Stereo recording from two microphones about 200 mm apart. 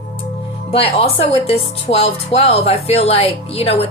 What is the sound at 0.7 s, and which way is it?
Speech, 30° left (ahead or behind).